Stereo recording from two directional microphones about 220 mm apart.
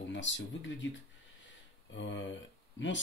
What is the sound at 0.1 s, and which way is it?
Speech, 55° left (ahead or behind).